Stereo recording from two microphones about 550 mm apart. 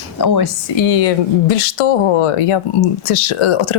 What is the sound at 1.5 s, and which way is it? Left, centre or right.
Speech, left.